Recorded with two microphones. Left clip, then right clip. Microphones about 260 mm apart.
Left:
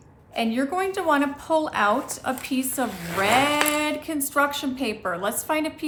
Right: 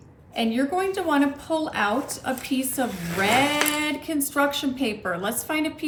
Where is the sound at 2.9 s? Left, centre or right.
Left.